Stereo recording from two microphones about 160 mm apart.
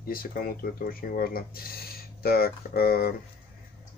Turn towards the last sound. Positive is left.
turn(degrees=75)  # may be behind; listen again after turning